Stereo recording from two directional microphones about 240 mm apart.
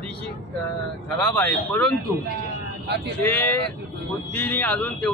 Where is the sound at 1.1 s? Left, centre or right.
Centre.